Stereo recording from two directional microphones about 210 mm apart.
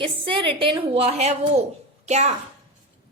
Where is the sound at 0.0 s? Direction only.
25° right (ahead or behind).